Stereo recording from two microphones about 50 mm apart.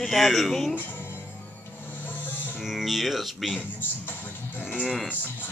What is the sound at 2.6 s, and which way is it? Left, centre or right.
Speech, centre.